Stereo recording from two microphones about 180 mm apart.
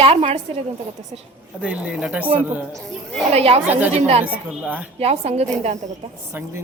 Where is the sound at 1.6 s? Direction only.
5° right (ahead or behind).